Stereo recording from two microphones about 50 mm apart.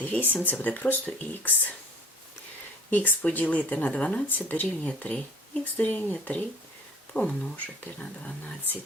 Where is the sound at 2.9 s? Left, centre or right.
Left.